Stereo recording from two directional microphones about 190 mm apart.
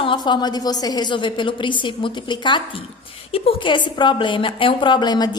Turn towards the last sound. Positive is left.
turn(degrees=20)  # may be behind; listen again after turning